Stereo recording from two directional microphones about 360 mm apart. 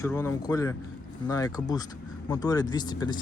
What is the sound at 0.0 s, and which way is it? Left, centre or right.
Speech, centre.